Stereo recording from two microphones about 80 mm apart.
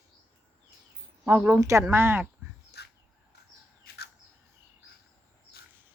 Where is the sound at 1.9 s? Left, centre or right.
Right.